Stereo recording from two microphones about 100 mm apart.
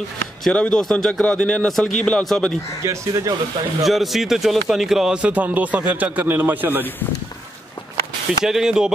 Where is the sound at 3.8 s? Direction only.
Centre (ahead or behind); by 6.8 s 20° right (ahead or behind).